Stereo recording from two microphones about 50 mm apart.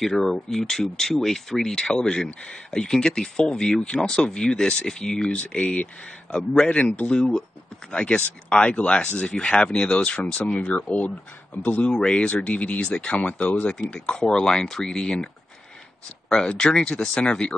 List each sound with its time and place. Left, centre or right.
0.0 s speech: centre; by 5.7 s left
6.3 s speech: centre
10.3 s speech: left
11.9 s speech: centre
12.2 s speech: left; by 15.2 s centre
16.3 s speech: centre